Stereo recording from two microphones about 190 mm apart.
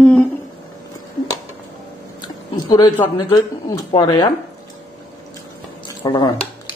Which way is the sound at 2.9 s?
20° left (ahead or behind).